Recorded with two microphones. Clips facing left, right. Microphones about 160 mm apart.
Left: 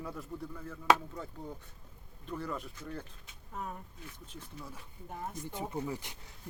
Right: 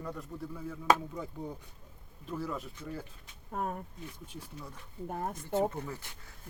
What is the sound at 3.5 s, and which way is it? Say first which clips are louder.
Speech: right 6 dB; 50° right (ahead or behind).